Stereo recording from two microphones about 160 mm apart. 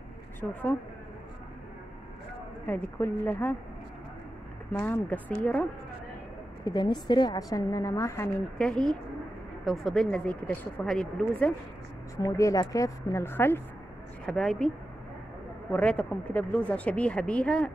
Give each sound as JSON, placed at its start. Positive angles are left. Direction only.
{"t": 0.4, "sound": "a woman's voice", "side_deg": 10}
{"t": 2.6, "sound": "a woman's voice", "side_deg": 10}
{"t": 4.7, "sound": "a woman's voice", "side_deg": 15}
{"t": 6.6, "sound": "a woman's voice", "side_deg": 25}
{"t": 8.5, "sound": "a woman's voice", "side_deg": 5}
{"t": 12.2, "sound": "a woman's voice", "side_deg": 20}
{"t": 14.2, "sound": "speech", "side_deg": 5}
{"t": 15.7, "sound": "a woman's voice", "side_deg": 10}